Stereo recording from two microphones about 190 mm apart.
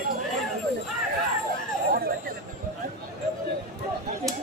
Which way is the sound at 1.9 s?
55° right (ahead or behind).